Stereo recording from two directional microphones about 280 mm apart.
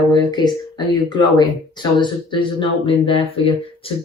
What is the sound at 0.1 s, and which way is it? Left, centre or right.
Speech, centre.